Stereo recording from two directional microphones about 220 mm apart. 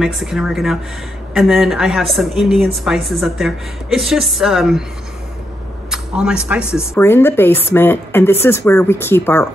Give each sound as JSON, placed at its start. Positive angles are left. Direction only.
{"t": 0.0, "sound": "a woman's voice", "side_deg": 0}
{"t": 5.9, "sound": "a man's voice", "side_deg": -5}
{"t": 6.8, "sound": "speech", "side_deg": 10}